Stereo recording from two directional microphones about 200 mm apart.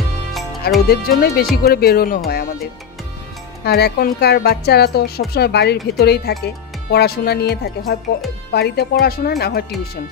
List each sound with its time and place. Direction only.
0.3 s music: centre (ahead or behind)
0.8 s a woman's voice: 50° left (ahead or behind)